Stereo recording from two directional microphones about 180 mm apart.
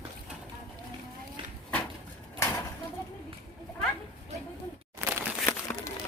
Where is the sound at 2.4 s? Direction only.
15° left (ahead or behind).